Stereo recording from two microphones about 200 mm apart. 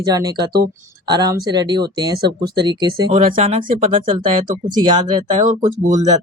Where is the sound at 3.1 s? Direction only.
30° right (ahead or behind).